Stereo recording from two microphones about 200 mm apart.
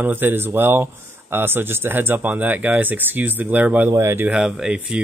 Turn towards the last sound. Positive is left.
turn(degrees=-5)  # may be behind; listen again after turning